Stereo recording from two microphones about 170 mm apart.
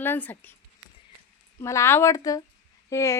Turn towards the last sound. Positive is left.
turn(degrees=15)  # may be behind; listen again after turning